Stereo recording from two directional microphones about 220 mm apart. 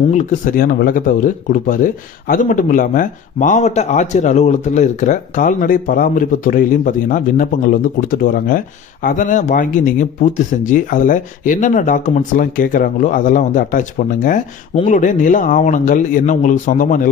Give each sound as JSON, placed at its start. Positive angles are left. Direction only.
{"t": 0.1, "sound": "speech", "side_deg": 35}